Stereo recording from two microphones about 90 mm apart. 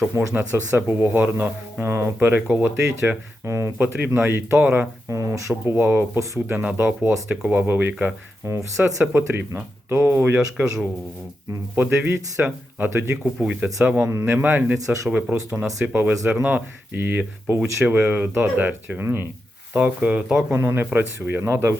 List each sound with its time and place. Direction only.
0.1 s speech: 35° right (ahead or behind)
0.3 s speech: 20° right (ahead or behind)
2.1 s speech: 15° right (ahead or behind)
5.0 s speech: 35° right (ahead or behind)
10.3 s speech: 15° right (ahead or behind); by 13.1 s 30° right (ahead or behind)
13.4 s speech: 10° right (ahead or behind)
14.1 s speech: 25° right (ahead or behind)
20.5 s speech: 25° right (ahead or behind)